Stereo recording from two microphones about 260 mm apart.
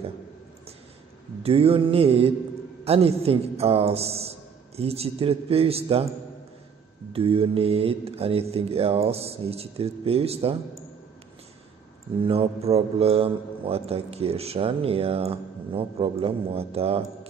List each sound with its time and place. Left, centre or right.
1.4 s a man's voice: right
7.1 s a man's voice: right
12.2 s a man's voice: right